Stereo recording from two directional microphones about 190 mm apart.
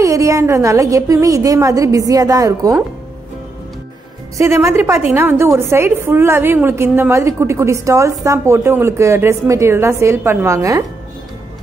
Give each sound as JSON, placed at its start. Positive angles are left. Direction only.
{"t": 0.0, "sound": "a woman's voice", "side_deg": -15}
{"t": 4.4, "sound": "a woman's voice", "side_deg": -15}